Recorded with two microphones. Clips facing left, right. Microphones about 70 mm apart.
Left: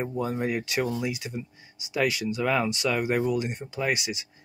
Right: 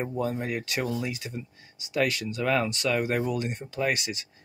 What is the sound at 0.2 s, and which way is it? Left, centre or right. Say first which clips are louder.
Speech: left 2 dB; centre.